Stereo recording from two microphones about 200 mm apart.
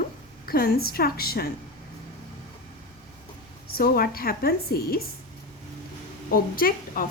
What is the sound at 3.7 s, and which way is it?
A woman's voice, 50° left (ahead or behind).